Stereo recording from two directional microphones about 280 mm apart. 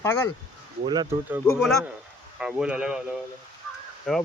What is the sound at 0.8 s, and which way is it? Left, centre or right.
Speech, centre.